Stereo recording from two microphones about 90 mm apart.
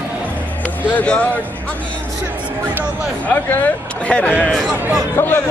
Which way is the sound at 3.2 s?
15° left (ahead or behind).